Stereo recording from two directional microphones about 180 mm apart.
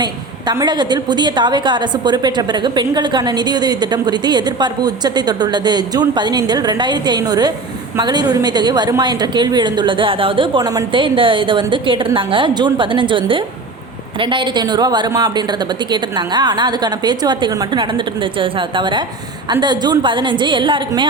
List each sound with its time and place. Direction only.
0.0 s a woman's voice: 25° right (ahead or behind)